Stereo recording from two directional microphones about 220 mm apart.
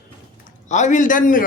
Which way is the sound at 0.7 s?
35° left (ahead or behind).